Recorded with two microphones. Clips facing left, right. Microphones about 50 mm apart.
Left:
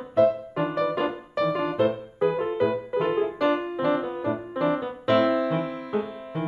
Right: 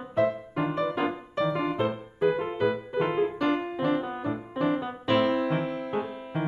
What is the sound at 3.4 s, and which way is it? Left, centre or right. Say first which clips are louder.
Music: left 3 dB; right.